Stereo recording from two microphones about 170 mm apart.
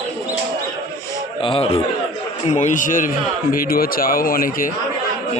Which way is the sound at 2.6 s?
50° left (ahead or behind).